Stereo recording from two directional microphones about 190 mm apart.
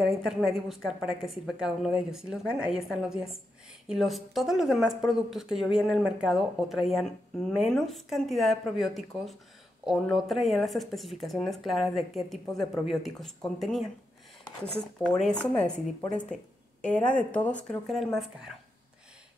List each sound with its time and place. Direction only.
0.1 s speech: centre (ahead or behind)
15.0 s speech: 5° left (ahead or behind)